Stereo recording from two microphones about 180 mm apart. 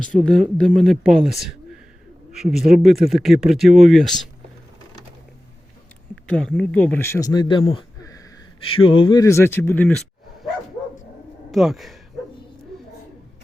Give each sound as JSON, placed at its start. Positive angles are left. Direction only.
{"t": 0.0, "sound": "speech", "side_deg": 5}
{"t": 6.2, "sound": "speech", "side_deg": 5}
{"t": 8.0, "sound": "a sound", "side_deg": 20}
{"t": 8.6, "sound": "speech", "side_deg": 30}
{"t": 9.2, "sound": "speech", "side_deg": 15}
{"t": 11.5, "sound": "speech", "side_deg": 0}